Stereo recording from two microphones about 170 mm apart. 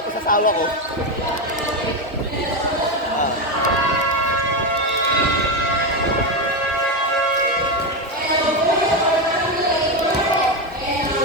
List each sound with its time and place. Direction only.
0.3 s speech: 55° left (ahead or behind)